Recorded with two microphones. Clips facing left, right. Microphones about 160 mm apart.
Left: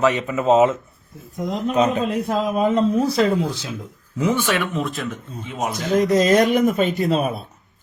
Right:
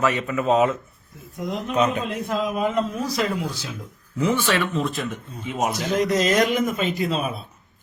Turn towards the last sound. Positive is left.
turn(degrees=40)  # may be behind; listen again after turning